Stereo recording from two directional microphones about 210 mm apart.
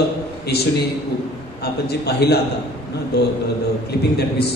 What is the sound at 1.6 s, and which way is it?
Speech, 50° left (ahead or behind).